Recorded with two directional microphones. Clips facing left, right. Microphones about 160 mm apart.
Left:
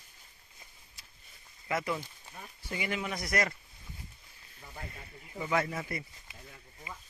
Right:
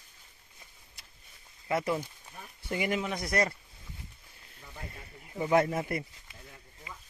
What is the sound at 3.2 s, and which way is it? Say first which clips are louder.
Speech: right 2 dB; 25° right (ahead or behind).